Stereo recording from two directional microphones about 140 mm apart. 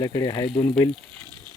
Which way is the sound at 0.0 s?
25° left (ahead or behind).